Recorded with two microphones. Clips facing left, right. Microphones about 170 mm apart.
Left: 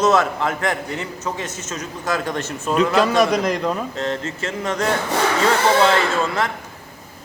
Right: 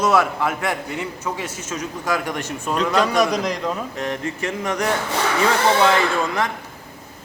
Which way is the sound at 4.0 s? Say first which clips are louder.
Left 1 dB; 15° right (ahead or behind).